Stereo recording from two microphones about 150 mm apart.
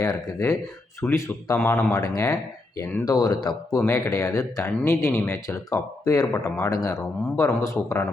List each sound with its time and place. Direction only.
0.0 s speech: 25° left (ahead or behind)